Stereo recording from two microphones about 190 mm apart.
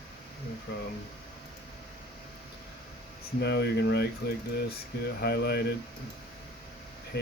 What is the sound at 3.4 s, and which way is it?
Speech, 60° left (ahead or behind).